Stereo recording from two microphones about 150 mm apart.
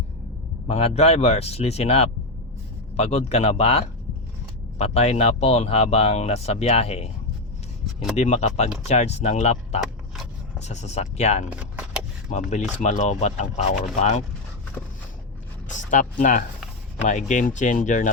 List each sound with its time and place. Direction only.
0.7 s speech: 45° left (ahead or behind)
8.1 s speech: 50° left (ahead or behind)
11.6 s keys jangling: 10° right (ahead or behind)
12.3 s speech: 50° left (ahead or behind)
15.7 s speech: 55° left (ahead or behind)